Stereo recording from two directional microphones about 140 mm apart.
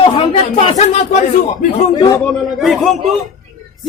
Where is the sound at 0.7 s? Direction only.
55° left (ahead or behind).